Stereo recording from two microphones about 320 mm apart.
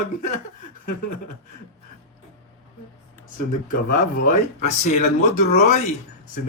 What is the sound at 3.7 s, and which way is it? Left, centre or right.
Speech, left.